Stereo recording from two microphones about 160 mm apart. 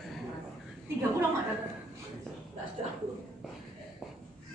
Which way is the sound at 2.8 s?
35° right (ahead or behind).